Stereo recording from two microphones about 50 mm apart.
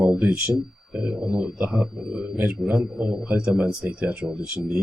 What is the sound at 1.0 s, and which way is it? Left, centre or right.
A man's voice, centre.